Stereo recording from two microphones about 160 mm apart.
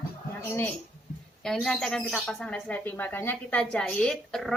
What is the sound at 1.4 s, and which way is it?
A woman's voice, 5° left (ahead or behind).